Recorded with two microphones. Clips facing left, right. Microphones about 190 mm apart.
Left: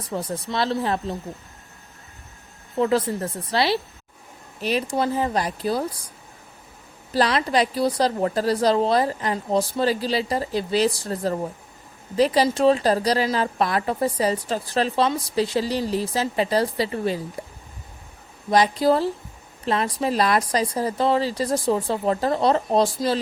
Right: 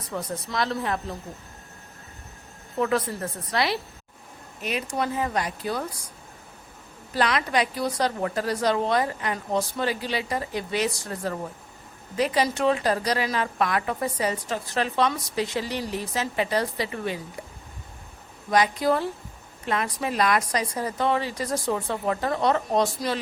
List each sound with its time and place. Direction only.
0.1 s a woman's voice: 30° left (ahead or behind)
2.7 s a woman's voice: 25° left (ahead or behind)
7.1 s a woman's voice: 35° left (ahead or behind)
17.4 s a sound: 35° left (ahead or behind)
18.5 s a woman's voice: 35° left (ahead or behind)